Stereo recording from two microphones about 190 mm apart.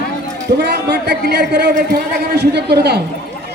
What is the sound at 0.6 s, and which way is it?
A man's voice, 65° right (ahead or behind).